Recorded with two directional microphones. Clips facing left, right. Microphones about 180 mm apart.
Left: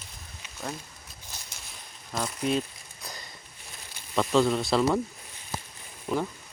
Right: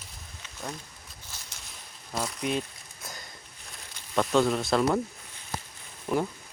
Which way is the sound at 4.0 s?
Centre (ahead or behind).